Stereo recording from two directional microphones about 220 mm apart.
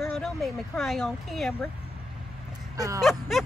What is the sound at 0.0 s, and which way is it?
Speech, 5° left (ahead or behind).